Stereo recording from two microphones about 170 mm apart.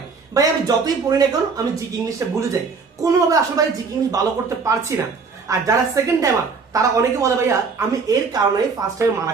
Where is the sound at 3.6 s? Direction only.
20° right (ahead or behind).